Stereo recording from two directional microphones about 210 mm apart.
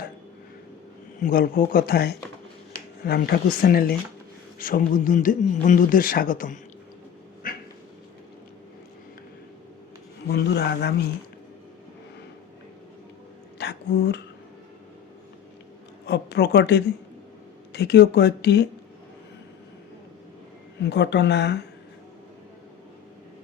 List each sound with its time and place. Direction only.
1.2 s a man's voice: 45° left (ahead or behind)
7.4 s dog: 45° left (ahead or behind)
10.2 s speech: 50° left (ahead or behind)
13.6 s a sound: 50° left (ahead or behind)
16.0 s speech: 55° left (ahead or behind)
20.8 s speech: 55° left (ahead or behind)